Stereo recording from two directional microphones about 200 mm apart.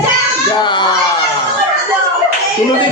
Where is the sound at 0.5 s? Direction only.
25° left (ahead or behind).